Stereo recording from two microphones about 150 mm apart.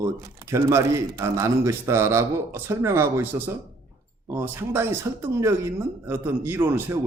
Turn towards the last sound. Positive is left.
turn(degrees=-15)  # may be behind; listen again after turning